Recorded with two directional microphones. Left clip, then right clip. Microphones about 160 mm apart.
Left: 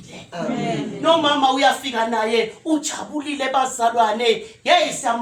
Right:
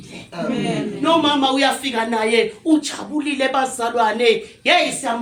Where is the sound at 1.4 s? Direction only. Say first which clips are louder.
Left 1 dB; 20° left (ahead or behind).